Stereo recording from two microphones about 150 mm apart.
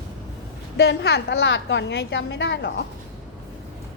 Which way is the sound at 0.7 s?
90° left.